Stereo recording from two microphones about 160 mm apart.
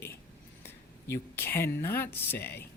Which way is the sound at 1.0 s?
15° left (ahead or behind).